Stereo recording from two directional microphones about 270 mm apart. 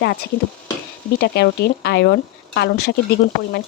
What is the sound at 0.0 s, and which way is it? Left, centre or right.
Speech, left.